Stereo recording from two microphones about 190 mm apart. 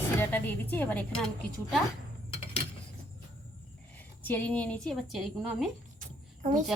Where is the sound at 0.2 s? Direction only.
10° left (ahead or behind).